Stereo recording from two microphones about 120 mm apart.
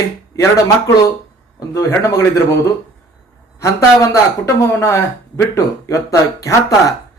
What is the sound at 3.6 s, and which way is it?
Speech, 25° left (ahead or behind).